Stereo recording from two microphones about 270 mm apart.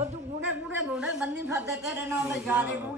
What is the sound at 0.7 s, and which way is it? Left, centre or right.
A woman's voice, centre.